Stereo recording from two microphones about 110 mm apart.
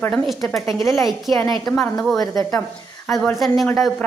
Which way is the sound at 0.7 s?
25° left (ahead or behind).